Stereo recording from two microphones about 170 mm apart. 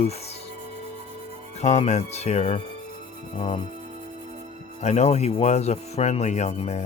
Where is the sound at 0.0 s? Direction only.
40° left (ahead or behind).